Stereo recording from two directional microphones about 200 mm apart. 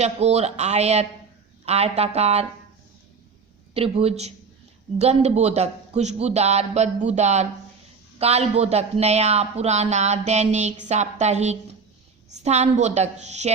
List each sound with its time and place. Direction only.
0.0 s speech: 35° right (ahead or behind)
3.8 s speech: 30° right (ahead or behind)